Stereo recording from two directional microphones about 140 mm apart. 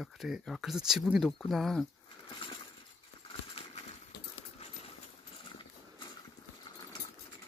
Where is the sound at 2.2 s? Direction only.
35° left (ahead or behind).